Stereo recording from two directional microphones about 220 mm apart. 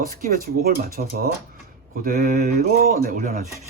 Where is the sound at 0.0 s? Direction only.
40° right (ahead or behind).